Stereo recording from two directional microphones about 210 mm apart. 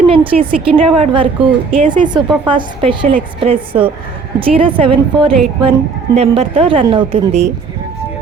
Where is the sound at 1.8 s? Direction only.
40° right (ahead or behind).